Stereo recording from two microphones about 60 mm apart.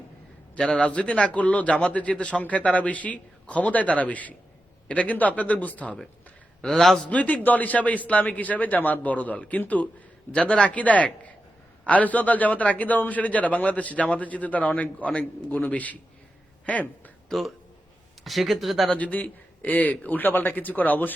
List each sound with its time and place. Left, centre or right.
0.7 s a man's voice: centre
6.6 s a man's voice: centre
7.1 s a man's voice: left
17.2 s a man's voice: centre
18.9 s a man's voice: left